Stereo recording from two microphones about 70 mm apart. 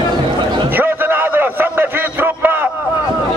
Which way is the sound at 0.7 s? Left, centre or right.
Right.